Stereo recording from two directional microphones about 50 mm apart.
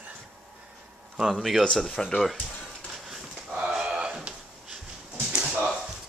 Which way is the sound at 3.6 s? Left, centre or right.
Centre.